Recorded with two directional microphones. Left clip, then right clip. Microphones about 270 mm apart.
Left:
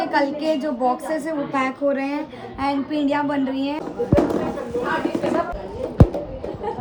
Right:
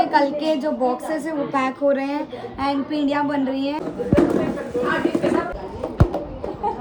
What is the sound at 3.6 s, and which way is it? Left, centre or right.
Speech, centre.